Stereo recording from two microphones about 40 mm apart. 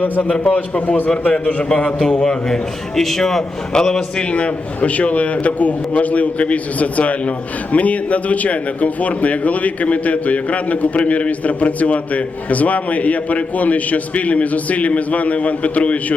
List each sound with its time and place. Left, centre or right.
0.0 s a man's voice: left
2.5 s a man's voice: centre; by 16.1 s left